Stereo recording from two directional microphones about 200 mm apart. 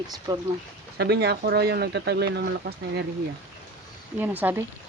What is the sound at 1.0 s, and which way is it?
Speech, 55° right (ahead or behind).